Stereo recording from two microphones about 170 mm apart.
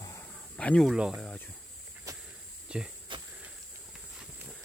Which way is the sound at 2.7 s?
5° right (ahead or behind).